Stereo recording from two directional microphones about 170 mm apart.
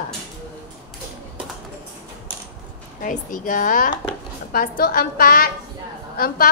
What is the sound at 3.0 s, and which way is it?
A woman's voice, 50° left (ahead or behind).